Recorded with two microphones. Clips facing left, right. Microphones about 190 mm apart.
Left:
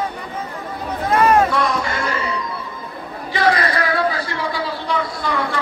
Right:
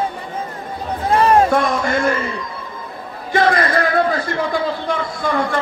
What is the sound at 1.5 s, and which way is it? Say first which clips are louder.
Music: right 4 dB; 50° right (ahead or behind).